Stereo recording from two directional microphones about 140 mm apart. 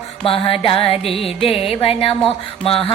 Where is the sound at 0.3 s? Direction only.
40° left (ahead or behind).